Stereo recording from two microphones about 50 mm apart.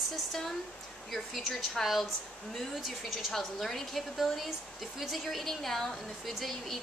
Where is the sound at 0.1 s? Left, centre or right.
Centre.